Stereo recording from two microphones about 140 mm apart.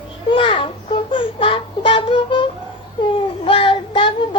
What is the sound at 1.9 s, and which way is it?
Music, 40° left (ahead or behind).